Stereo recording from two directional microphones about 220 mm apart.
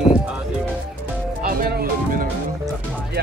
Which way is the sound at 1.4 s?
40° right (ahead or behind).